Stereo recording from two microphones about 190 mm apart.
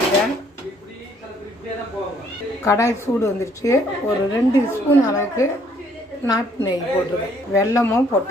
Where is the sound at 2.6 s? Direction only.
15° left (ahead or behind).